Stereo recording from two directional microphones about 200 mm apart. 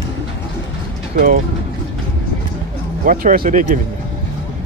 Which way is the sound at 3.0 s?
45° right (ahead or behind).